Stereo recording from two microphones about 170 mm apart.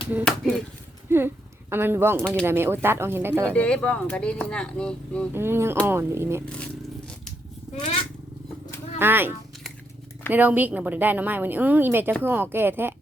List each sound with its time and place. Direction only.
0.3 s speech: 5° left (ahead or behind)
1.1 s a woman's voice: 15° right (ahead or behind)
3.5 s speech: 10° left (ahead or behind)
5.3 s a woman's voice: 15° right (ahead or behind)
9.0 s speech: 10° right (ahead or behind)
10.3 s a woman's voice: 10° right (ahead or behind)